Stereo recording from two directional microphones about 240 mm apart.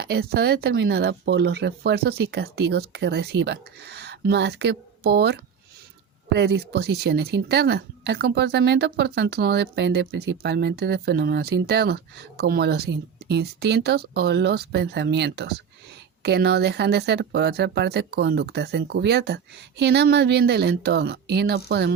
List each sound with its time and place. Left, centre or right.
0.0 s a woman's voice: right